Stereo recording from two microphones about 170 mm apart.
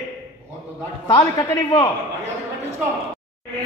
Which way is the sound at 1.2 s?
20° left (ahead or behind).